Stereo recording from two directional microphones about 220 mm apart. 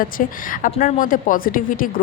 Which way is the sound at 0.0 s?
40° left (ahead or behind).